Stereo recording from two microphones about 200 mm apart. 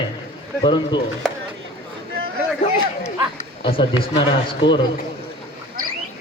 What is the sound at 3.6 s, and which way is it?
A man's voice, 25° left (ahead or behind).